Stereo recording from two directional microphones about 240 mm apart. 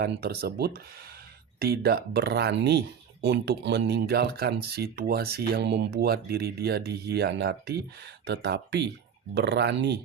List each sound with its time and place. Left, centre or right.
0.0 s speech: right